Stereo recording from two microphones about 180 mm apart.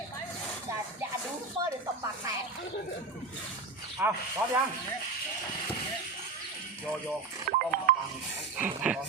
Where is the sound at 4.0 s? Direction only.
10° right (ahead or behind).